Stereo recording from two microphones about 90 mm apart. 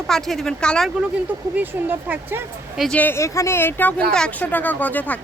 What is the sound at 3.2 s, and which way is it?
Speech, 30° left (ahead or behind).